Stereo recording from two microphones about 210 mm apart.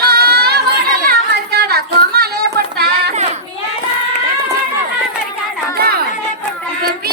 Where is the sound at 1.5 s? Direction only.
45° right (ahead or behind).